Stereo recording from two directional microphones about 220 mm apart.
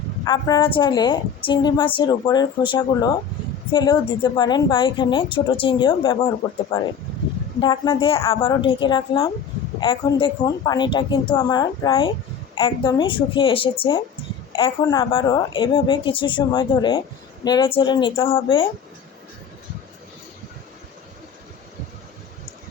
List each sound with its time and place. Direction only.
0.3 s a woman's voice: 20° left (ahead or behind)